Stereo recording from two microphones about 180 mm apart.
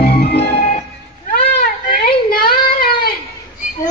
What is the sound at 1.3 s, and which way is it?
Baby cry, 55° left (ahead or behind).